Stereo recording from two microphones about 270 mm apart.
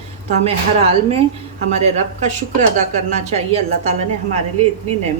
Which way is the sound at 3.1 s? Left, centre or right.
Right.